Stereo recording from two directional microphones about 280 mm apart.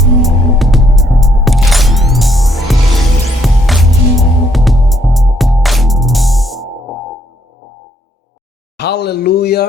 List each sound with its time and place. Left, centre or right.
0.2 s music: centre
8.8 s speech: left